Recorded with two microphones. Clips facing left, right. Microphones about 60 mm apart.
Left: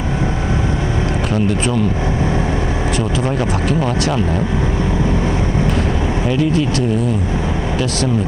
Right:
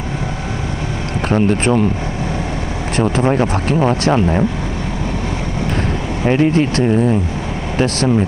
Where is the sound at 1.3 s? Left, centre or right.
Right.